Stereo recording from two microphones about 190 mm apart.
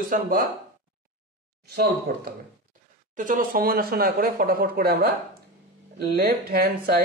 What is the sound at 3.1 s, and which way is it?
Speech, 45° right (ahead or behind).